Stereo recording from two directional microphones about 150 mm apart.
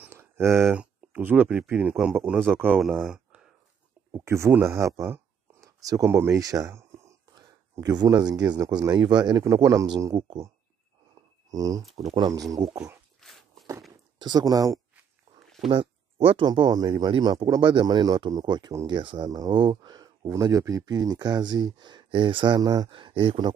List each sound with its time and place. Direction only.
0.0 s a sound: 15° right (ahead or behind)
0.7 s speech: 10° right (ahead or behind)
4.1 s speech: 20° right (ahead or behind)
11.5 s speech: 25° right (ahead or behind)
13.2 s walk: centre (ahead or behind)
14.1 s speech: 30° right (ahead or behind)
15.6 s speech: 5° left (ahead or behind)
16.3 s speech: 35° right (ahead or behind)